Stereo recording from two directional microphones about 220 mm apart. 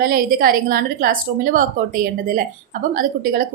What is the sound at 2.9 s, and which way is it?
Speech, 40° right (ahead or behind).